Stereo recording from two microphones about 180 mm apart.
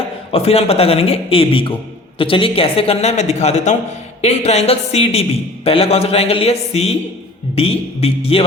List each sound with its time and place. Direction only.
0.3 s a man's voice: 35° left (ahead or behind)